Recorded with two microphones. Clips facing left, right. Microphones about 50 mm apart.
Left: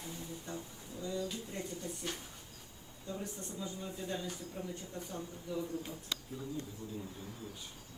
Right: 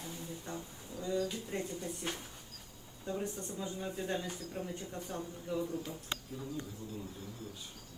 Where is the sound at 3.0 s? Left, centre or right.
Right.